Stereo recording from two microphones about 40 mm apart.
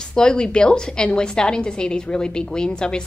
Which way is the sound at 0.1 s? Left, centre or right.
Centre.